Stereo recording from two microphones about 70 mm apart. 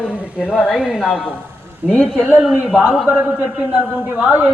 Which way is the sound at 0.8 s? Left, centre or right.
Centre.